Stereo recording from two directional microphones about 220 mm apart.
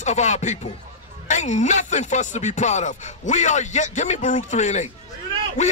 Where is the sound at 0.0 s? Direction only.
30° left (ahead or behind).